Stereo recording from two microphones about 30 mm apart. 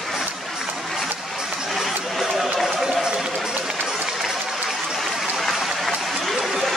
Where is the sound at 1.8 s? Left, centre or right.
Centre.